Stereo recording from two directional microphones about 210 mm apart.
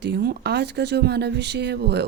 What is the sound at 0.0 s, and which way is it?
Speech, 50° right (ahead or behind).